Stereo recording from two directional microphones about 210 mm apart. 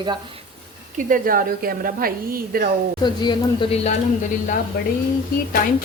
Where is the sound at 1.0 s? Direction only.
40° right (ahead or behind).